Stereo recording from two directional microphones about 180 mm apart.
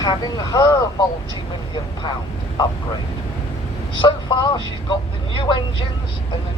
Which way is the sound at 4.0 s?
25° left (ahead or behind).